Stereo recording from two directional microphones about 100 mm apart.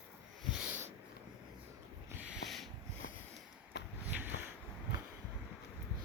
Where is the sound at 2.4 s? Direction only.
Centre (ahead or behind).